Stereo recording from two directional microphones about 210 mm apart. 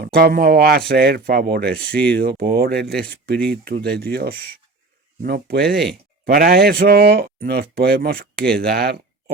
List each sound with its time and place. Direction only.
0.0 s speech: 45° right (ahead or behind)